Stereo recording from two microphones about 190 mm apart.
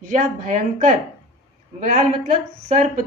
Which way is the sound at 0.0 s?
45° right (ahead or behind).